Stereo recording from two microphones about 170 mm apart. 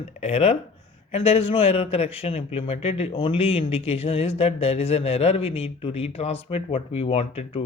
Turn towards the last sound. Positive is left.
turn(degrees=35)  # may be behind; listen again after turning